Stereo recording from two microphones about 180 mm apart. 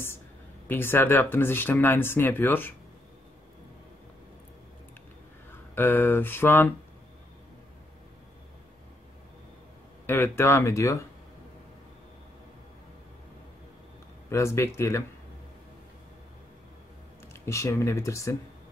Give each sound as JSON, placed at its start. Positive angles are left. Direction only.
{"t": 0.7, "sound": "speech", "side_deg": 10}
{"t": 5.5, "sound": "speech", "side_deg": 10}
{"t": 10.0, "sound": "speech", "side_deg": 10}
{"t": 14.3, "sound": "speech", "side_deg": 15}
{"t": 17.3, "sound": "speech", "side_deg": 15}